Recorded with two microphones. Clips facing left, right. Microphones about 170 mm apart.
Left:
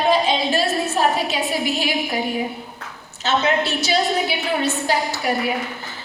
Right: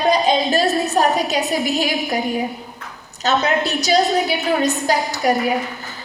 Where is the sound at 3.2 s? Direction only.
40° right (ahead or behind).